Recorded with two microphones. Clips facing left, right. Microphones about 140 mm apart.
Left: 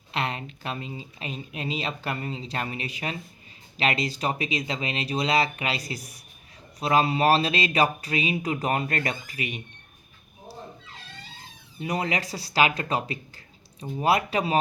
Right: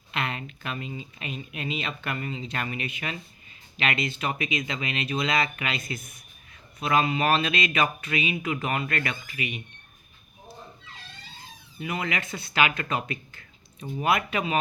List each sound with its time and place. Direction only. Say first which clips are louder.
0.1 s speech: left 2 dB; 35° left (ahead or behind)
11.8 s speech: left 3 dB; 35° left (ahead or behind)